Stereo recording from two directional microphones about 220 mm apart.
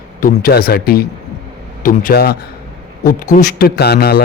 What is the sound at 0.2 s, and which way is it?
A man's voice, 40° left (ahead or behind).